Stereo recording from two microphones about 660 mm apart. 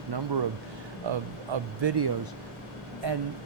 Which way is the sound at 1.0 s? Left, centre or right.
Right.